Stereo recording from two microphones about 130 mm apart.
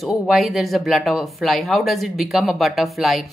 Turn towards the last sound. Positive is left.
turn(degrees=0)  # may be behind; listen again after turning